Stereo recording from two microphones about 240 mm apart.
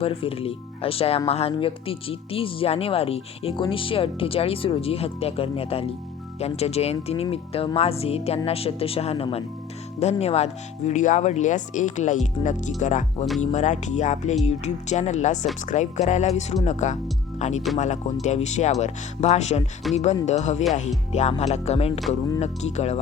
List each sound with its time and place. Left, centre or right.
0.0 s speech: left
19.9 s speech: centre
20.2 s speech: left